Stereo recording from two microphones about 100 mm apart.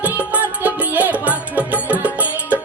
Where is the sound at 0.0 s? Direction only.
15° right (ahead or behind).